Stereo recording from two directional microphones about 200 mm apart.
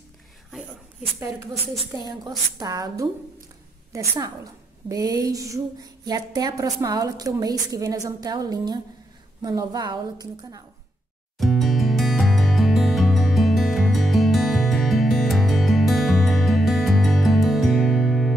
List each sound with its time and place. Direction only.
1.9 s a woman's voice: 20° right (ahead or behind)
11.3 s music: centre (ahead or behind)